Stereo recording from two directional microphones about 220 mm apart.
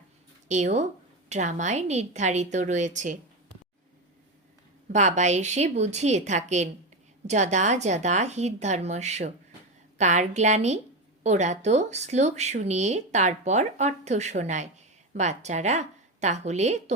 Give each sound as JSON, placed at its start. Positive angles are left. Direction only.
{"t": 0.4, "sound": "speech", "side_deg": -30}
{"t": 4.9, "sound": "a woman's voice", "side_deg": -30}